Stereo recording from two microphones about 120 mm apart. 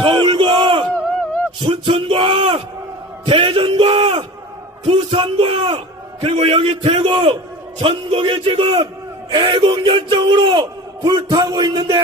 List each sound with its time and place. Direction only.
0.0 s battle cry: 45° right (ahead or behind)
1.6 s a man's voice: 45° right (ahead or behind)